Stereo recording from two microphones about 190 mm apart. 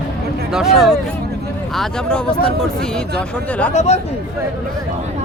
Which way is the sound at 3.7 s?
35° left (ahead or behind).